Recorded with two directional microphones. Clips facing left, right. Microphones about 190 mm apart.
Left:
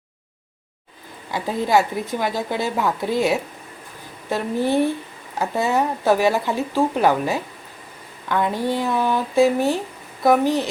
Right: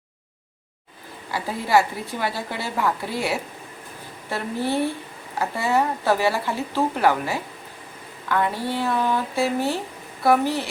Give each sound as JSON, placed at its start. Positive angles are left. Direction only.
{"t": 1.3, "sound": "a woman's voice", "side_deg": 15}